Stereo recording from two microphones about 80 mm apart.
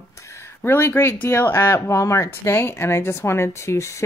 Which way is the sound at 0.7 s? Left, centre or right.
Left.